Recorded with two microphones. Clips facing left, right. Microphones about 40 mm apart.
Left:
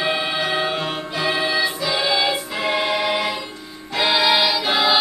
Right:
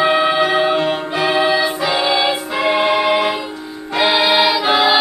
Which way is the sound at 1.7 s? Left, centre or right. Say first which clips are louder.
Right 4 dB; right.